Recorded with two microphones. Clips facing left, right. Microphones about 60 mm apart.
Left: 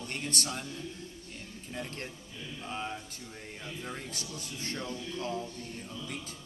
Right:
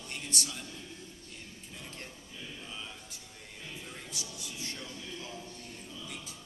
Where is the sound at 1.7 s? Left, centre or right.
Left.